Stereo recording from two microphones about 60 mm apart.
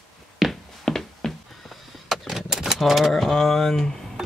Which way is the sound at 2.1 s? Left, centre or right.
Centre.